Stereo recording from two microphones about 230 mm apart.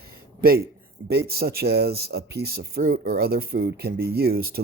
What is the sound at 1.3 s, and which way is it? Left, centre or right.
Speech, right.